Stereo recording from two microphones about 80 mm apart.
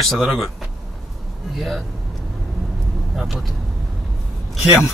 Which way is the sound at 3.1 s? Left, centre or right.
Centre.